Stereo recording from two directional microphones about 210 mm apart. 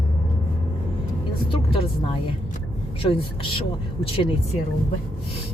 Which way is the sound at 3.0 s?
25° left (ahead or behind).